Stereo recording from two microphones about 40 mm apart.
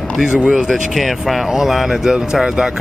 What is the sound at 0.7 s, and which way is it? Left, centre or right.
Speech, centre.